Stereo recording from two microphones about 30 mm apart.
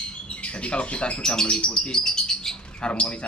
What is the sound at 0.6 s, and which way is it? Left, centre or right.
A man's voice, left.